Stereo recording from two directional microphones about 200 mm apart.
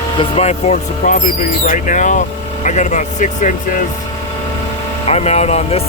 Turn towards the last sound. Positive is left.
turn(degrees=30)  # may be behind; listen again after turning